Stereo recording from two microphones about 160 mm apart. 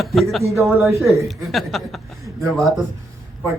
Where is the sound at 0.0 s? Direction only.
Centre (ahead or behind).